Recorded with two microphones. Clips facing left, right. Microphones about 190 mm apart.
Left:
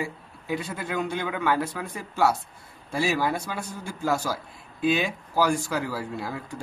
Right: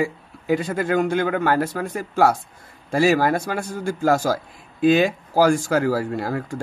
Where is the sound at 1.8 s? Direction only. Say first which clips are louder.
Right 6 dB; 55° right (ahead or behind).